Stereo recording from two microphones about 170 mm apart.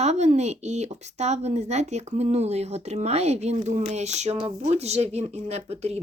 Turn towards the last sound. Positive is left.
turn(degrees=-40)  # may be behind; listen again after turning